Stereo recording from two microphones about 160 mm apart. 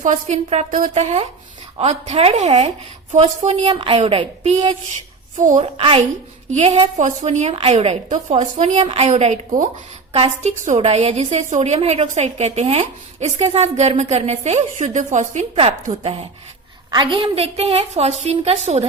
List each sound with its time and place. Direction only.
0.0 s a woman's voice: 45° right (ahead or behind)
16.9 s speech: 30° right (ahead or behind)